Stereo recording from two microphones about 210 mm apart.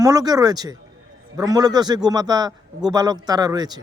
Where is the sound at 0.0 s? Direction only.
20° right (ahead or behind).